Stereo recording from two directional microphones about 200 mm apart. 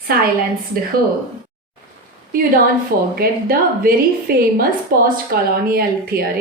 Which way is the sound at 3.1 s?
50° right (ahead or behind).